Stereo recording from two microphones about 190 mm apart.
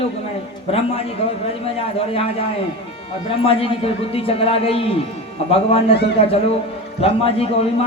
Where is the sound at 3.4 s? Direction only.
30° left (ahead or behind).